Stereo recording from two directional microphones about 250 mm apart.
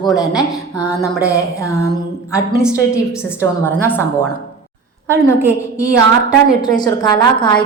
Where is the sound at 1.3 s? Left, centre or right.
Centre.